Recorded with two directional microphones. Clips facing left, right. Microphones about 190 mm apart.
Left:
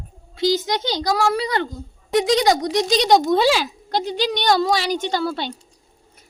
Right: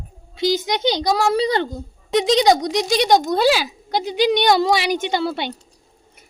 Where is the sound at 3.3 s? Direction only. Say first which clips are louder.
Even; centre (ahead or behind); by 5.3 s 20° right (ahead or behind).